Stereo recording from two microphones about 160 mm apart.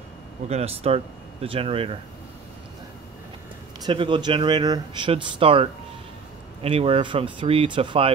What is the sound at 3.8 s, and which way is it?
Speech, 30° right (ahead or behind).